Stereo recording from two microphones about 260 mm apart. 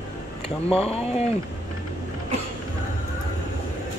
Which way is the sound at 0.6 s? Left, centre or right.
Left.